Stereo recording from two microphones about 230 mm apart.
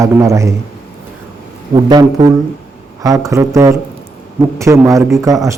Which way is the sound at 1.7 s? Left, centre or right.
Centre.